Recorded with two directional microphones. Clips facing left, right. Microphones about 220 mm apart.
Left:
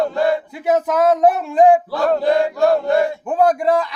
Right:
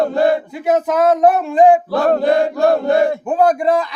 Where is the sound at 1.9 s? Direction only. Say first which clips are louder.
Right 2 dB; 55° right (ahead or behind).